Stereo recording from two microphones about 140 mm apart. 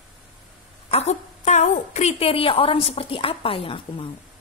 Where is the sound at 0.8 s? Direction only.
50° left (ahead or behind).